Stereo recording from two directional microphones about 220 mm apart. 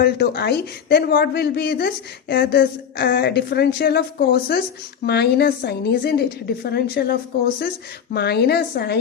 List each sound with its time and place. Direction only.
0.0 s a woman's voice: 45° left (ahead or behind)